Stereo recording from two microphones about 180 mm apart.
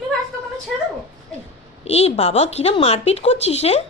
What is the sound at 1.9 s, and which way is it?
Speech, 35° left (ahead or behind).